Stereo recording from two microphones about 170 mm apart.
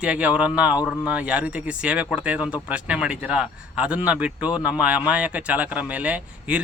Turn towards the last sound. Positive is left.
turn(degrees=-10)  # may be behind; listen again after turning